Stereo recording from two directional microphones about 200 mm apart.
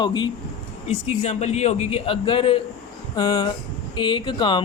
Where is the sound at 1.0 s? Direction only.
30° left (ahead or behind).